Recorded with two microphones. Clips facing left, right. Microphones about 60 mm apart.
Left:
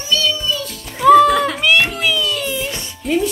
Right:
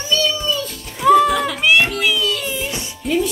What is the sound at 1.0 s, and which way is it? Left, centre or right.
Music, centre.